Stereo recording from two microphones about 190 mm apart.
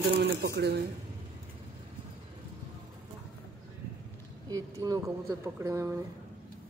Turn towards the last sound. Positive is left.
turn(degrees=-15)  # may be behind; listen again after turning